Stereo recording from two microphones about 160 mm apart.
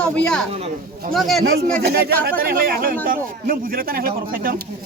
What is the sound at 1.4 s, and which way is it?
Speech, 70° right (ahead or behind).